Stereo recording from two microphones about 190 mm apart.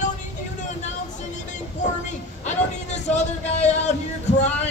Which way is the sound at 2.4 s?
35° left (ahead or behind).